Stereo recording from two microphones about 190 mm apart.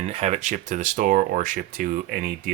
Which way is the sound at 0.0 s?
35° right (ahead or behind).